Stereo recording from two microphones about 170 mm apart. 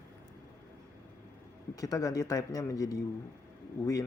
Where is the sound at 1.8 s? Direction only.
20° left (ahead or behind).